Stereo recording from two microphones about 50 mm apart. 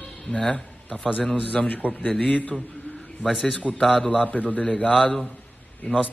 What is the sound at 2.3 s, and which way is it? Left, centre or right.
Speech, left.